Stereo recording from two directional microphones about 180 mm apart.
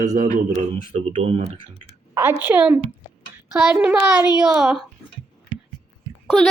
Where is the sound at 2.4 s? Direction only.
10° right (ahead or behind).